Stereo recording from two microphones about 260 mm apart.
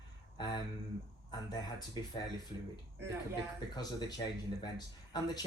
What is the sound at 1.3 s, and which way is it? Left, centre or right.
Speech, centre.